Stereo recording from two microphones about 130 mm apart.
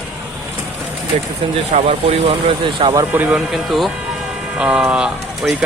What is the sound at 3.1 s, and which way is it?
Speech, 10° right (ahead or behind).